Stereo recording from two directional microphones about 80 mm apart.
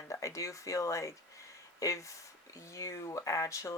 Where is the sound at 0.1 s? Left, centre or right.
Left.